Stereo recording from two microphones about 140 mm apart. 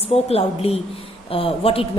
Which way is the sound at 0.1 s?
45° left (ahead or behind).